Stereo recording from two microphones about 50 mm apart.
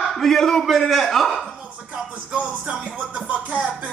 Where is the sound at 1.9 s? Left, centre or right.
Centre.